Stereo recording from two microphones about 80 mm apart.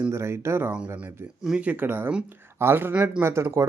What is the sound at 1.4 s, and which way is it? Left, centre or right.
Speech, centre.